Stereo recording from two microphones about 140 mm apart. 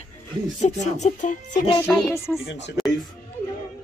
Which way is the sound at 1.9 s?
20° left (ahead or behind).